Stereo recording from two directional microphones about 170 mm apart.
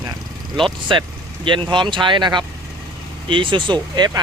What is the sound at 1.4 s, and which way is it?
Speech, 30° right (ahead or behind).